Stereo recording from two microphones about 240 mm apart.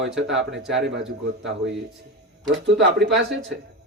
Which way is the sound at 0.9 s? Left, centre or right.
Right.